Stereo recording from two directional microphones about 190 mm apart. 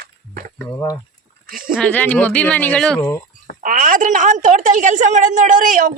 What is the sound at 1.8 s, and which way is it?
Speech, 10° left (ahead or behind).